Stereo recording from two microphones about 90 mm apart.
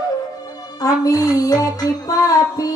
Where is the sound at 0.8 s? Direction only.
45° left (ahead or behind).